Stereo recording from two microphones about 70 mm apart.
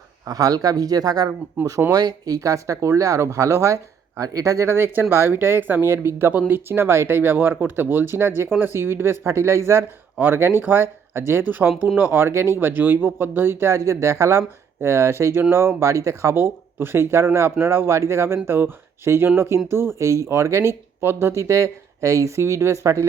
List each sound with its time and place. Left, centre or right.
0.3 s speech: right
1.6 s speech: right
1.9 s speech: right